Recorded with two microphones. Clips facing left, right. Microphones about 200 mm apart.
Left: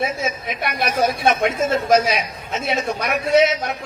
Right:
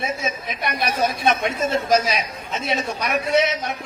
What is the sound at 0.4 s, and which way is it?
A man's voice, 50° left (ahead or behind).